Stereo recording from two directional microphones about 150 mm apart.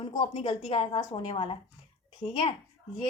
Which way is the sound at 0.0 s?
35° left (ahead or behind).